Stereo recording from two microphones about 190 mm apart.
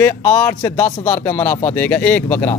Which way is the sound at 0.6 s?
20° left (ahead or behind).